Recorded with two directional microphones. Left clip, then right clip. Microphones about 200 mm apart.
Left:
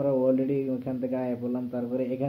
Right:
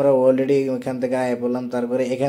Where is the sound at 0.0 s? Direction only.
15° right (ahead or behind).